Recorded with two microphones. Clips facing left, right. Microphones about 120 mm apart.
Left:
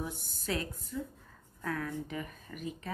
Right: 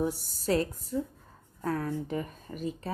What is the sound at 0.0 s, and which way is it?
Speech, 35° right (ahead or behind).